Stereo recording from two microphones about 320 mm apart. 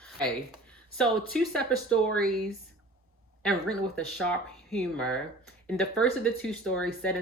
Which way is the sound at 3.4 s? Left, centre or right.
Centre.